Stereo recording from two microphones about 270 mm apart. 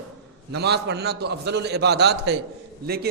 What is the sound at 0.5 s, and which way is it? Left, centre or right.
A man's voice, right.